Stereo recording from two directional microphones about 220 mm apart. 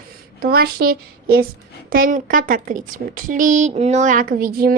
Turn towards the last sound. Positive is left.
turn(degrees=-40)  # may be behind; listen again after turning